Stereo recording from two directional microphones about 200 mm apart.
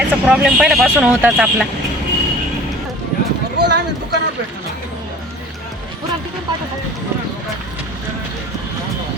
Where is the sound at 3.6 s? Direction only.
60° right (ahead or behind).